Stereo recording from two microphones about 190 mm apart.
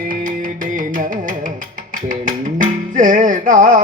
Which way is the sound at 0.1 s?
45° right (ahead or behind).